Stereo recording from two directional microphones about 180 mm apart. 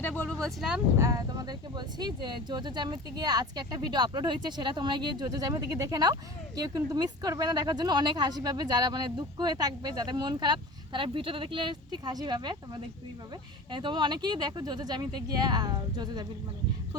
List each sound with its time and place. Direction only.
0.2 s speech: 5° left (ahead or behind)
0.9 s speech: 20° right (ahead or behind)